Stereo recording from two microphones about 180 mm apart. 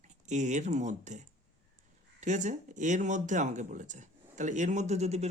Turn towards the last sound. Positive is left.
turn(degrees=-35)  # may be behind; listen again after turning